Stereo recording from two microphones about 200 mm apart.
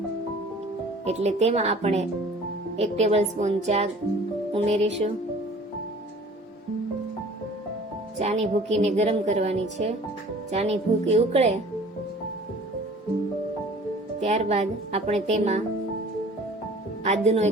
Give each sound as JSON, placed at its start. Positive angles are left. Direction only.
{"t": 1.0, "sound": "a woman's voice", "side_deg": -35}
{"t": 8.2, "sound": "a woman's voice", "side_deg": -35}
{"t": 14.2, "sound": "a woman's voice", "side_deg": -35}
{"t": 17.0, "sound": "a woman's voice", "side_deg": -35}